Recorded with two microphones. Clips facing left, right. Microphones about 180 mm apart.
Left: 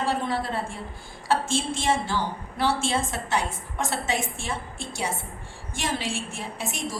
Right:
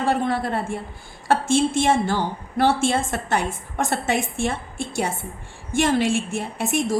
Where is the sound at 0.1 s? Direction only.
55° right (ahead or behind).